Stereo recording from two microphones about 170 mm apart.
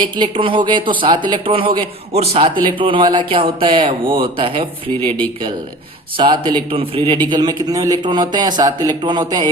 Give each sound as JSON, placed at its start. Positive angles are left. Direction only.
{"t": 0.0, "sound": "a man's voice", "side_deg": -30}